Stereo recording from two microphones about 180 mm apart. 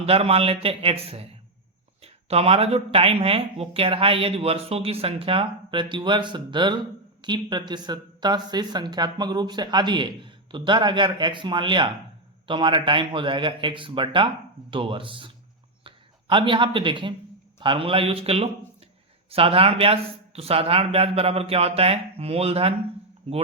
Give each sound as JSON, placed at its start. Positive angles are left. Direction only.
{"t": 0.0, "sound": "a man's voice", "side_deg": -35}